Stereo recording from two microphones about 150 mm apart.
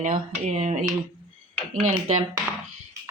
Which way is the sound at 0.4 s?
45° right (ahead or behind).